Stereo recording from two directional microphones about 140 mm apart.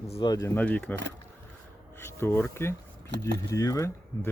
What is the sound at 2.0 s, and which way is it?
Speech, 15° left (ahead or behind).